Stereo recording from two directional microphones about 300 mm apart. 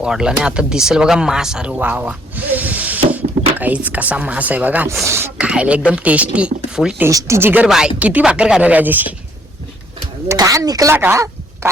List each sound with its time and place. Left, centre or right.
0.0 s speech: centre
10.2 s speech: centre